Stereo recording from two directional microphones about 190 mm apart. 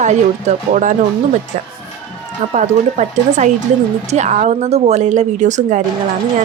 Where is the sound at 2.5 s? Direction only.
40° right (ahead or behind).